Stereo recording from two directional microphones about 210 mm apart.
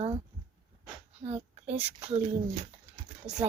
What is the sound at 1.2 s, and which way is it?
Speech, 30° right (ahead or behind).